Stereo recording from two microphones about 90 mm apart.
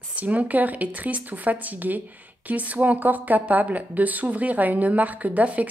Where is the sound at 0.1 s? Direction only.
15° right (ahead or behind).